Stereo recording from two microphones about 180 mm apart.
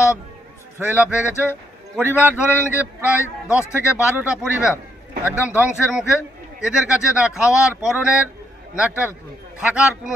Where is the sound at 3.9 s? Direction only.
10° right (ahead or behind).